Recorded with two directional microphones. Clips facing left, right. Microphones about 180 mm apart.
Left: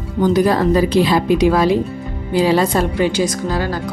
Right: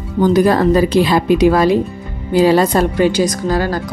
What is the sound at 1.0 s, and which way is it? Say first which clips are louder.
A woman's voice: right 2 dB; 50° right (ahead or behind).